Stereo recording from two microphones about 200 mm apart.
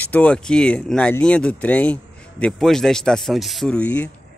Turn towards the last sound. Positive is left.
turn(degrees=5)  # may be behind; listen again after turning